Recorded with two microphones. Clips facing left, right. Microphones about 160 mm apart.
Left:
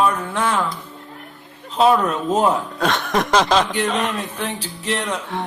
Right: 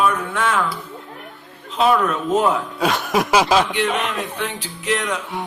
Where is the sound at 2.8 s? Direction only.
5° right (ahead or behind).